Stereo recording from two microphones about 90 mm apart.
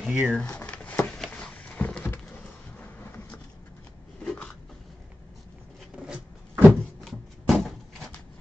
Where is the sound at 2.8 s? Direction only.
20° left (ahead or behind).